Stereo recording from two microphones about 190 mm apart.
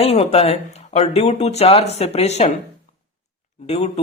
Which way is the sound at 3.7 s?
35° left (ahead or behind).